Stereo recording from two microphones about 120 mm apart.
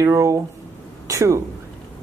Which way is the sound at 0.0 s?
25° right (ahead or behind).